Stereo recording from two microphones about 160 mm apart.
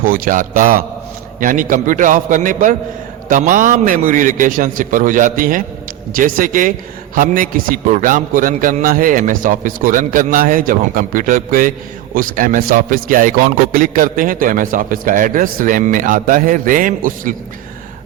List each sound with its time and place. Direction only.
0.0 s a man's voice: 60° right (ahead or behind)